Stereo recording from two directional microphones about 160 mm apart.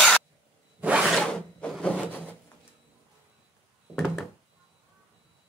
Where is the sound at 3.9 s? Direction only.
5° left (ahead or behind).